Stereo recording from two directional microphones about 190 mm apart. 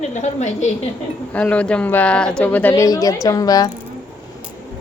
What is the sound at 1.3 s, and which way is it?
A woman's voice, 5° left (ahead or behind).